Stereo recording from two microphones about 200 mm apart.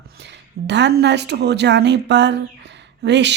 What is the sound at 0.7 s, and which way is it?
Speech, 60° right (ahead or behind).